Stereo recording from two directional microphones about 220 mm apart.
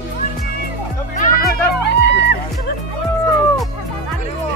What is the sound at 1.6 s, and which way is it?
Music, 50° left (ahead or behind).